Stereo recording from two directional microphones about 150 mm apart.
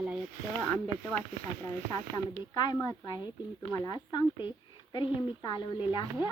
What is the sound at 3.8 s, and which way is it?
A woman's voice, 25° left (ahead or behind).